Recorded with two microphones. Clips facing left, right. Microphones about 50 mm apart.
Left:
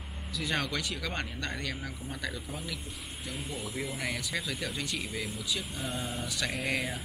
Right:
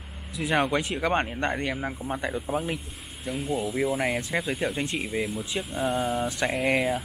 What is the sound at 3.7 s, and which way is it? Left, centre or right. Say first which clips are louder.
Speech: right 8 dB; right.